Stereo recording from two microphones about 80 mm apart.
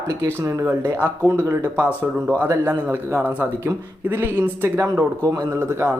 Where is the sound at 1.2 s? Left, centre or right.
Right.